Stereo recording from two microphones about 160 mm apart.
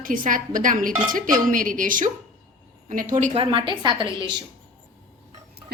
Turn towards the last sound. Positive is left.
turn(degrees=-30)  # may be behind; listen again after turning